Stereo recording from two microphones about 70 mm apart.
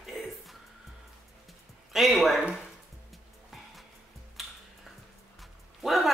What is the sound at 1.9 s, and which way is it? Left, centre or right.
Speech, centre.